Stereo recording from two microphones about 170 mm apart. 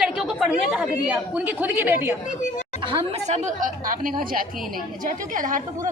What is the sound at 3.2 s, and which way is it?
A woman's voice, 45° right (ahead or behind).